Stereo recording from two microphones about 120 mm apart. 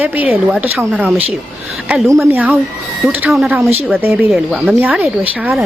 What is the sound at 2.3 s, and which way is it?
A woman's voice, 15° right (ahead or behind).